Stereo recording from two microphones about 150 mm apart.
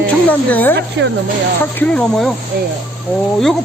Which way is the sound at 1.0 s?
90° right.